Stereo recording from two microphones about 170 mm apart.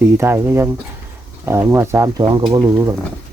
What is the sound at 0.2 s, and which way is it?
Speech, 15° right (ahead or behind).